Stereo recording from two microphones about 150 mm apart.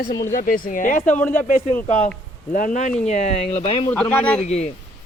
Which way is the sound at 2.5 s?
65° left (ahead or behind).